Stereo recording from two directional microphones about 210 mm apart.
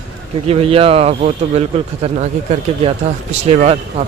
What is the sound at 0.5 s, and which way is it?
A man's voice, 25° right (ahead or behind).